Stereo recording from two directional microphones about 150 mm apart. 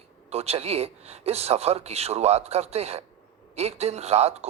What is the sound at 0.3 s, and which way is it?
A man's voice, 40° right (ahead or behind).